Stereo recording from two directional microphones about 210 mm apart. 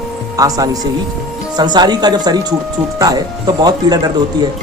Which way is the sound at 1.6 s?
20° right (ahead or behind).